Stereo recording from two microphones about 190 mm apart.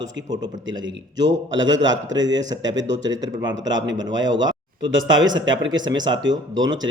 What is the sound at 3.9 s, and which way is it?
Speech, 75° right (ahead or behind).